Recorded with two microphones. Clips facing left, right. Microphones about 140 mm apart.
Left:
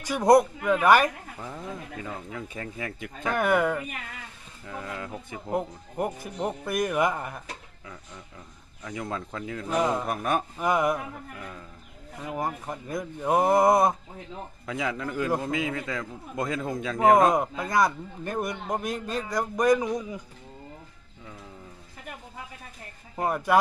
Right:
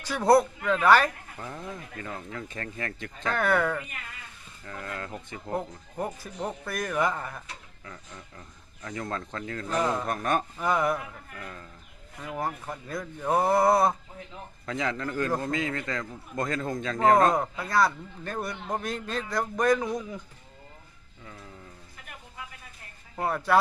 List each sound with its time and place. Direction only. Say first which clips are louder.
0.0 s a man's voice: left 2 dB; 15° left (ahead or behind)
14.7 s a man's voice: even; 5° left (ahead or behind)
23.1 s a man's voice: left 1 dB; 15° left (ahead or behind)